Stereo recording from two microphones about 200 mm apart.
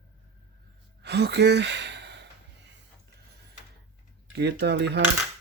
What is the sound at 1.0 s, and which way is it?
Sigh, 55° right (ahead or behind).